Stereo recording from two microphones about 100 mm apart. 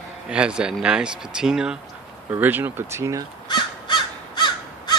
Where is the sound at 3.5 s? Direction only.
50° left (ahead or behind).